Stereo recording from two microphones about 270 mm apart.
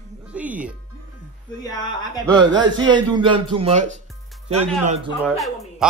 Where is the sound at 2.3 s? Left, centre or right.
Centre.